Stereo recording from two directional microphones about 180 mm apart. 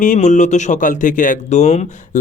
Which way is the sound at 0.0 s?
45° left (ahead or behind).